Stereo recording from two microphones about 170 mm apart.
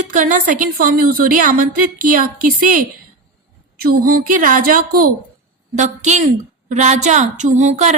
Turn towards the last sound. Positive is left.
turn(degrees=-45)  # may be behind; listen again after turning